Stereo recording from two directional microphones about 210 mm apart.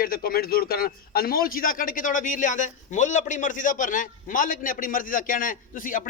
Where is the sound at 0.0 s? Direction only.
45° left (ahead or behind).